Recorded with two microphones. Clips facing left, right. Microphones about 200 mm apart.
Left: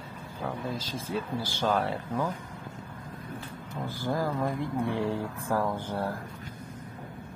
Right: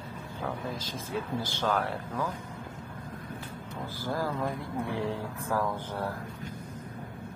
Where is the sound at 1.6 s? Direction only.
15° left (ahead or behind).